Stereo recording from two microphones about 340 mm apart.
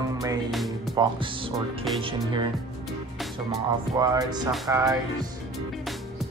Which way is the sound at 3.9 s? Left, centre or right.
Centre.